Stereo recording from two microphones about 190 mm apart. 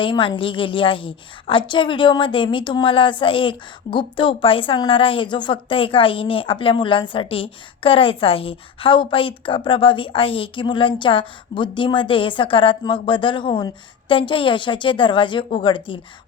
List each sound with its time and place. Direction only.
0.0 s a woman's voice: 25° left (ahead or behind)